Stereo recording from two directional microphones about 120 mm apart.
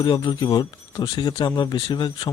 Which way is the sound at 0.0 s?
40° left (ahead or behind).